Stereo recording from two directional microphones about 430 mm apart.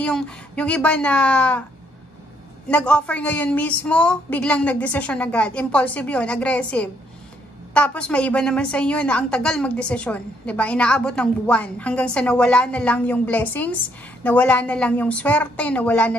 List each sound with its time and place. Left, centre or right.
0.0 s a woman's voice: centre
2.7 s a woman's voice: centre